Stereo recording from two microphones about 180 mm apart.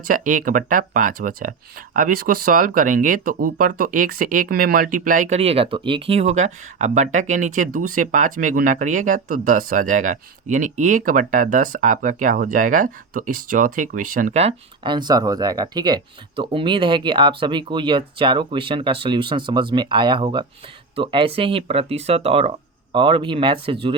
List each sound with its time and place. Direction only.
0.1 s speech: 45° right (ahead or behind); by 23.7 s 25° right (ahead or behind)